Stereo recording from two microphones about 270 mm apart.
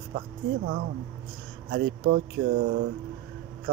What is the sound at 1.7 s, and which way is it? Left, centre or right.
Speech, right.